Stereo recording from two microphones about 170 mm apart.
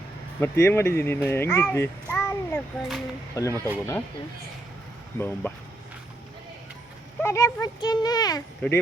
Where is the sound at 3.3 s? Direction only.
20° left (ahead or behind).